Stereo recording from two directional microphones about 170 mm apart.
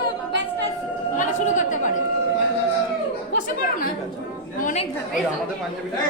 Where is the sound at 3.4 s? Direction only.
55° left (ahead or behind).